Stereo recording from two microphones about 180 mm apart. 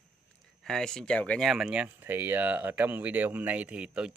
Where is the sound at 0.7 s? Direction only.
5° left (ahead or behind).